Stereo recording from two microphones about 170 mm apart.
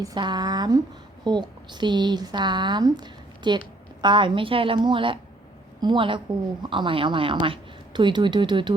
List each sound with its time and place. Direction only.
0.0 s a woman's voice: 25° right (ahead or behind)